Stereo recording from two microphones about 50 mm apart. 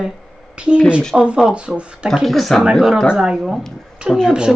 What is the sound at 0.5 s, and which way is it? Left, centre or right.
Speech, right.